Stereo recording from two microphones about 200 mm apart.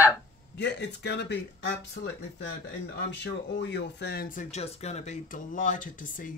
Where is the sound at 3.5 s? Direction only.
60° left (ahead or behind).